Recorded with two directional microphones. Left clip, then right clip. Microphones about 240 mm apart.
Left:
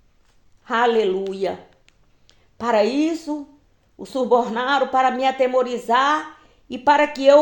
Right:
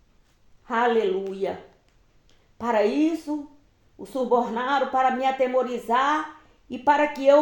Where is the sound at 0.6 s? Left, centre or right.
Left.